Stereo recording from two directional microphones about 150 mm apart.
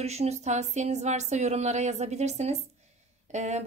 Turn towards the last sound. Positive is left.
turn(degrees=-50)  # may be behind; listen again after turning